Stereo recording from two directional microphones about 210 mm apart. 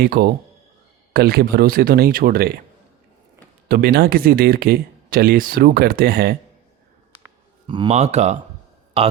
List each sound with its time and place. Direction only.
0.0 s speech: 45° right (ahead or behind)
3.7 s speech: 50° right (ahead or behind)
7.7 s speech: 25° right (ahead or behind)